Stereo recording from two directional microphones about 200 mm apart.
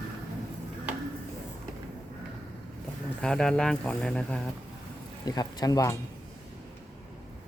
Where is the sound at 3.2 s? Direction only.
5° left (ahead or behind).